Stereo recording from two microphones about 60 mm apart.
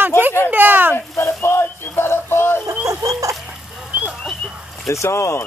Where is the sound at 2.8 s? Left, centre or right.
Right.